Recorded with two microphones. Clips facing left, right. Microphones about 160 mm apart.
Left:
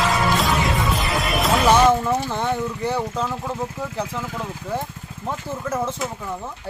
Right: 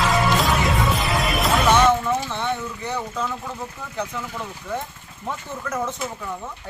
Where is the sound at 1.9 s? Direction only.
35° left (ahead or behind).